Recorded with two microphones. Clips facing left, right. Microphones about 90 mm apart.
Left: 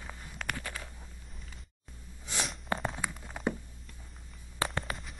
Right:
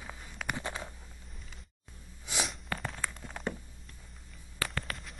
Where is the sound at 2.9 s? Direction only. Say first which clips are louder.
Left 1 dB; 10° left (ahead or behind).